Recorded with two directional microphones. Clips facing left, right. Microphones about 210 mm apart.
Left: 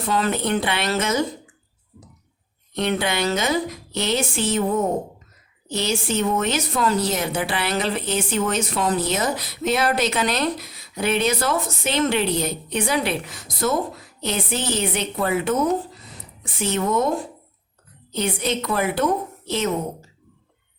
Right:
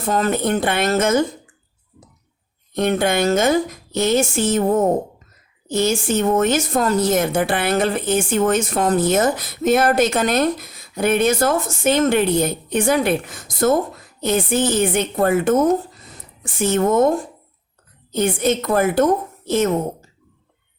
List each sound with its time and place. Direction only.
0.0 s a woman's voice: 45° right (ahead or behind)
2.7 s a woman's voice: 50° right (ahead or behind)